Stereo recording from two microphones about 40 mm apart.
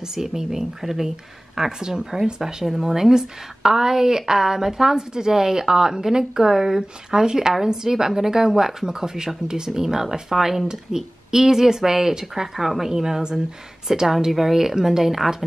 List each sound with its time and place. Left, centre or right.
0.1 s a woman's voice: centre